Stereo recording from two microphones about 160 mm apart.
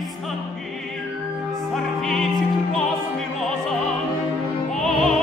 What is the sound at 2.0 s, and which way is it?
Music, 5° left (ahead or behind).